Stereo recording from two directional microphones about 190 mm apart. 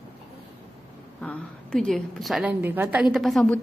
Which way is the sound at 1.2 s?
5° left (ahead or behind).